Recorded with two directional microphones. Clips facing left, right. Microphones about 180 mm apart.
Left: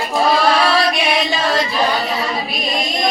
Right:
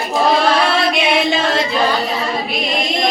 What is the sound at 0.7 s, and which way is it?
Music, 25° right (ahead or behind).